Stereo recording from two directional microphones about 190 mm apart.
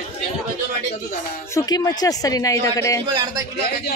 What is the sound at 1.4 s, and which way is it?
Speech, 20° left (ahead or behind).